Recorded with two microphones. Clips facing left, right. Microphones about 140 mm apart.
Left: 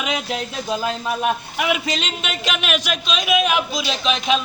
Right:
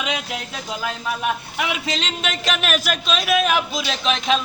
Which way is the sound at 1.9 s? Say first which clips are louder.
Left 1 dB; 30° right (ahead or behind).